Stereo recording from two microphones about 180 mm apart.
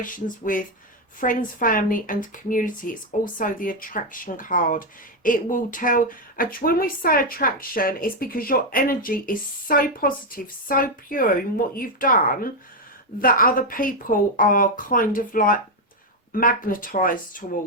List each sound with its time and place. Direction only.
0.0 s speech: 50° left (ahead or behind)